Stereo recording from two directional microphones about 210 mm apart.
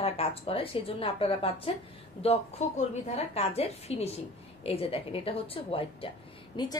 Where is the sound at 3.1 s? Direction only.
30° left (ahead or behind).